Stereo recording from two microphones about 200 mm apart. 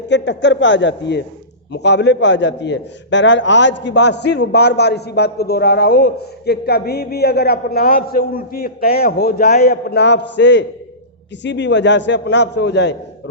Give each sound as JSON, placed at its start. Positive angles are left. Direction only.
{"t": 0.1, "sound": "a man's voice", "side_deg": 65}